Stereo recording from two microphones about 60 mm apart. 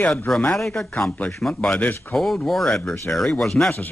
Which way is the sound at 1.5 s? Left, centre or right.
Left.